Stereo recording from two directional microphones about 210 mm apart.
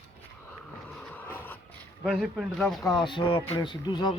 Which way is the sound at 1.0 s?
5° left (ahead or behind).